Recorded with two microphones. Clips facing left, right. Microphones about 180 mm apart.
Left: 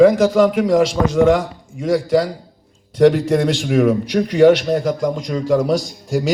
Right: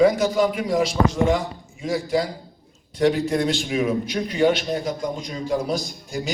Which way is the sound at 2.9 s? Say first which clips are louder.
Left 7 dB; 90° left.